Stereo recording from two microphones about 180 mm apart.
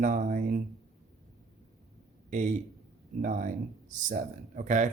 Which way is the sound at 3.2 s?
45° right (ahead or behind).